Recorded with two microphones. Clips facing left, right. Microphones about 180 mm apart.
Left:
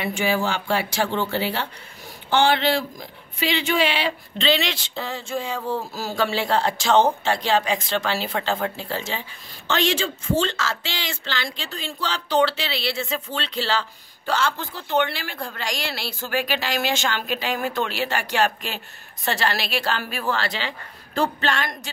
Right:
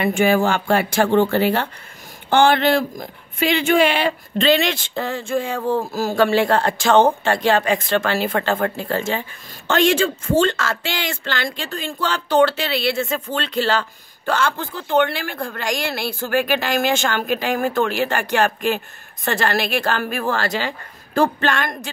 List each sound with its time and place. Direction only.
0.0 s speech: 50° right (ahead or behind)